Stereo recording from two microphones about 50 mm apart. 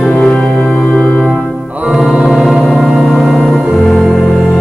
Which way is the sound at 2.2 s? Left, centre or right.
Centre.